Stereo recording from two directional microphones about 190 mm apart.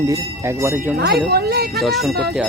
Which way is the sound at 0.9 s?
55° right (ahead or behind).